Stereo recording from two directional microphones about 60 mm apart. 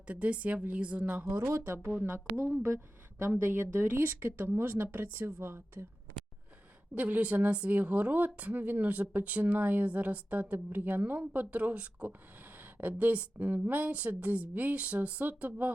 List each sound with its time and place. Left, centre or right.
0.1 s speech: right
1.5 s speech: right
2.3 s speech: right
6.9 s speech: right